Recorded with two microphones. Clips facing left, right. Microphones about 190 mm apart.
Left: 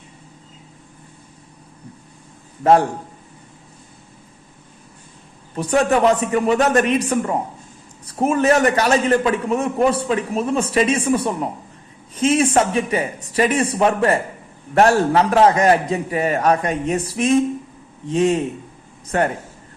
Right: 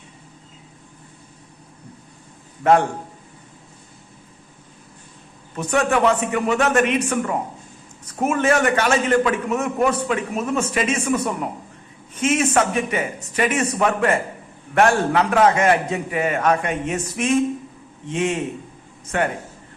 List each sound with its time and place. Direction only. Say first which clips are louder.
5.5 s a man's voice: left 3 dB; 35° left (ahead or behind)